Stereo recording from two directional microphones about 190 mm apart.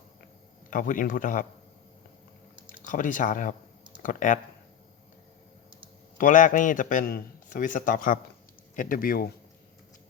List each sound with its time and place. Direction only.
0.7 s a man's voice: 45° left (ahead or behind)
2.8 s a man's voice: 45° left (ahead or behind)
6.1 s a man's voice: 45° left (ahead or behind)